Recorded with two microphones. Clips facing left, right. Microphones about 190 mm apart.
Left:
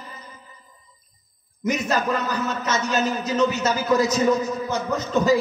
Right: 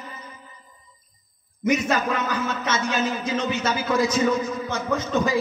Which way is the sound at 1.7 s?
40° left (ahead or behind).